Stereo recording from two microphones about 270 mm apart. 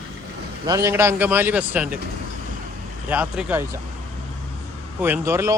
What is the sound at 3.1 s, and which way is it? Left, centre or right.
Speech, centre.